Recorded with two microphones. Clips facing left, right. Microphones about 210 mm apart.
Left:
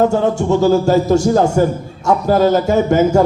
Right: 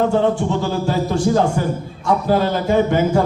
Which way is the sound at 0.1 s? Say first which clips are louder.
Left 2 dB; 45° left (ahead or behind).